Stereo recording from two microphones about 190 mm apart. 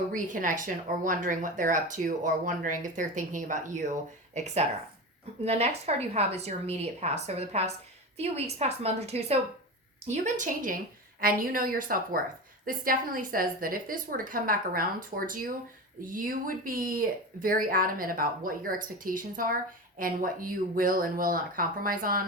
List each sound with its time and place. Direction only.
0.1 s a woman's voice: 45° right (ahead or behind)